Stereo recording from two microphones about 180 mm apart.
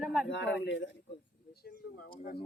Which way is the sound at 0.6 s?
90° left.